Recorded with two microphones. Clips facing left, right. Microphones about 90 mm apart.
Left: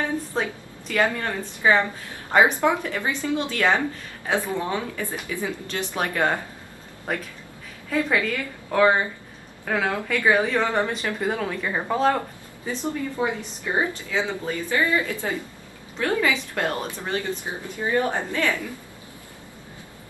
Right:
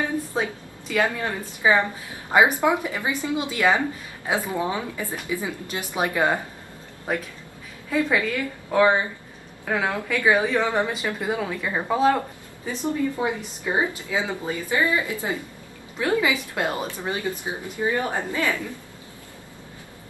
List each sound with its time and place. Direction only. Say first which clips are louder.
0.3 s a woman's voice: even; 5° right (ahead or behind)
8.6 s a woman's voice: even; centre (ahead or behind)
12.8 s a woman's voice: right 2 dB; 15° right (ahead or behind)